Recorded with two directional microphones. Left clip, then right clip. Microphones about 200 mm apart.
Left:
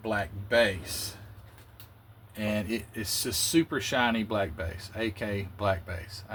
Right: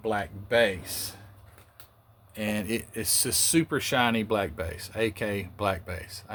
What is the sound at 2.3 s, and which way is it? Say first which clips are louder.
Speech: right 1 dB; 45° right (ahead or behind).